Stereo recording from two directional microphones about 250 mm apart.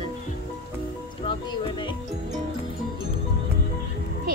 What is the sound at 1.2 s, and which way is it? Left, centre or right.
Speech, centre.